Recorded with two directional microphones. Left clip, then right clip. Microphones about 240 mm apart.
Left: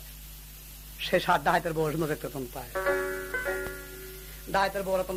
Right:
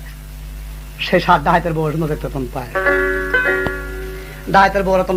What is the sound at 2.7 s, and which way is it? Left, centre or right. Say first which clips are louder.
Music: right 13 dB; right.